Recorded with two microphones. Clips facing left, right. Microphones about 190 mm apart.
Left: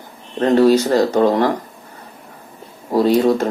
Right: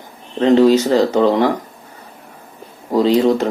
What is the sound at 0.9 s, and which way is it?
Speech, 10° left (ahead or behind).